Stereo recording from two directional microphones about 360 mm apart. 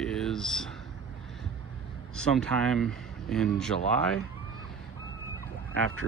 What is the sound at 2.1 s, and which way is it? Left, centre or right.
Speech, centre.